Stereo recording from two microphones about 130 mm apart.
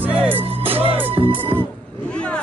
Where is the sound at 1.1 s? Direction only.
45° right (ahead or behind).